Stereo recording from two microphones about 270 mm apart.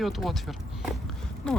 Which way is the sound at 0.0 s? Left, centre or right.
Centre.